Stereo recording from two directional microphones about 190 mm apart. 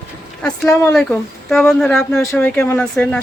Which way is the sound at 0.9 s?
Centre (ahead or behind).